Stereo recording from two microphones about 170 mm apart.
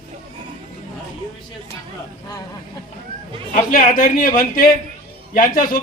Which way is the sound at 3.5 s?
55° left (ahead or behind).